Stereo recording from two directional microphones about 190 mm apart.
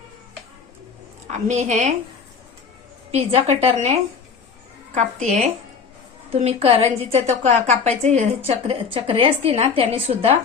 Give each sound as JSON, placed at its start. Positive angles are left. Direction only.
{"t": 1.3, "sound": "a woman's voice", "side_deg": -40}
{"t": 3.1, "sound": "a woman's voice", "side_deg": -30}
{"t": 4.9, "sound": "a woman's voice", "side_deg": -35}